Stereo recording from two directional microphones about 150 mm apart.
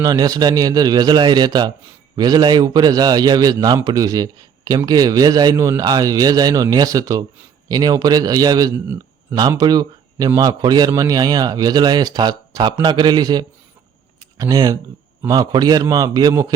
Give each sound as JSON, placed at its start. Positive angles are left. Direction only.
{"t": 0.0, "sound": "a man's voice", "side_deg": -25}
{"t": 14.2, "sound": "a sound", "side_deg": -25}
{"t": 15.3, "sound": "a man's voice", "side_deg": -25}